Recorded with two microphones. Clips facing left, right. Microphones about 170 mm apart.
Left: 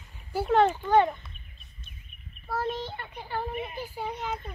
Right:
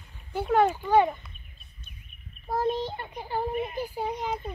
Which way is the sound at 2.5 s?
15° right (ahead or behind).